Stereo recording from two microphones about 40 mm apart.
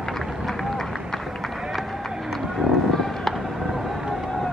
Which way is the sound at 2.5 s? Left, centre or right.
Centre.